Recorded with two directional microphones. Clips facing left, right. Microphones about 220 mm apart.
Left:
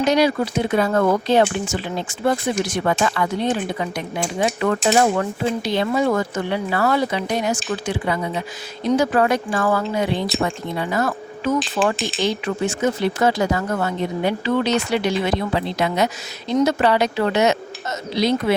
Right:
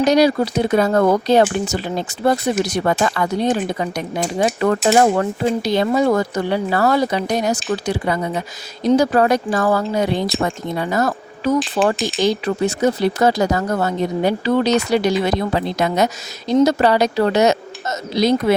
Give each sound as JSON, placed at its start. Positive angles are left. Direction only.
{"t": 0.0, "sound": "speech", "side_deg": -40}